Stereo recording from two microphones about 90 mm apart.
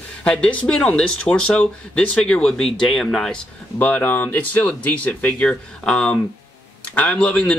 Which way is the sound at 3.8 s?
20° left (ahead or behind).